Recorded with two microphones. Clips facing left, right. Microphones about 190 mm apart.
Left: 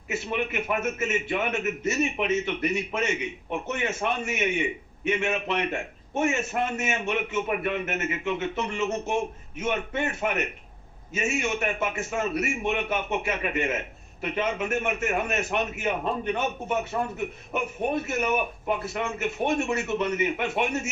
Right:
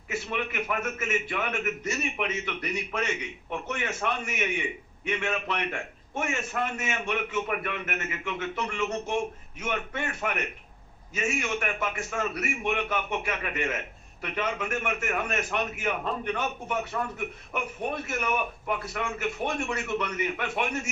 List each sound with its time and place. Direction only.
0.1 s a man's voice: 25° left (ahead or behind)